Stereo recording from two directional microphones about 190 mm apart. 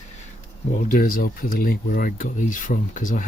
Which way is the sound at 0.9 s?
50° left (ahead or behind).